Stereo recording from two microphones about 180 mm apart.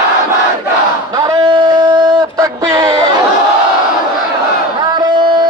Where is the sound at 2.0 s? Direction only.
20° right (ahead or behind).